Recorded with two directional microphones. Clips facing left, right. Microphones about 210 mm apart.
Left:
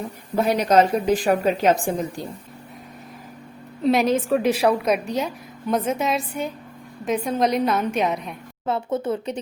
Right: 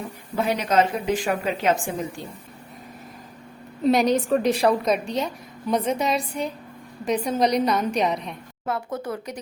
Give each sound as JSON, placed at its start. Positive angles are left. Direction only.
{"t": 0.3, "sound": "a woman's voice", "side_deg": 40}
{"t": 3.8, "sound": "a woman's voice", "side_deg": 0}
{"t": 8.6, "sound": "speech", "side_deg": 25}